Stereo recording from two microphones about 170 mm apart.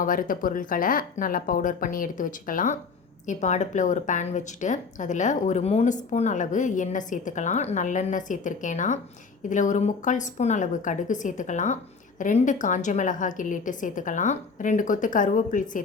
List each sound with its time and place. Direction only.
0.0 s a woman's voice: 55° left (ahead or behind)